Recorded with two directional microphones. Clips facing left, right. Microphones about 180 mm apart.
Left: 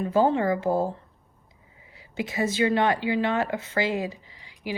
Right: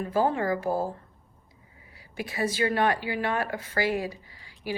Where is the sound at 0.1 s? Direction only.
25° left (ahead or behind).